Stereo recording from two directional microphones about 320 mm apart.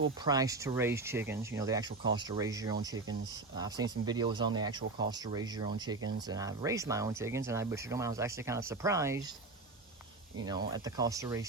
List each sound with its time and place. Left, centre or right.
0.3 s speech: centre
10.7 s speech: centre